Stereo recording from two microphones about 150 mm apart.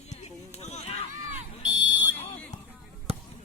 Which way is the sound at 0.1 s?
45° left (ahead or behind).